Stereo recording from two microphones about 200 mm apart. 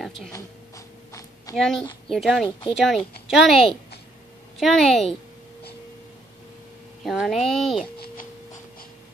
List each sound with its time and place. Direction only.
0.3 s a sound: 15° left (ahead or behind)
1.5 s a woman's voice: centre (ahead or behind)
7.0 s a woman's voice: centre (ahead or behind)